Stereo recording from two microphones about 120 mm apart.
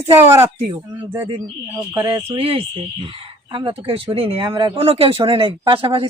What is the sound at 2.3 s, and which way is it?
Speech, 50° right (ahead or behind).